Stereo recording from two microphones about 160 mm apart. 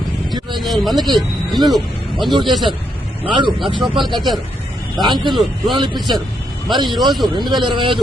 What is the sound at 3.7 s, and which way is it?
Speech, 30° right (ahead or behind).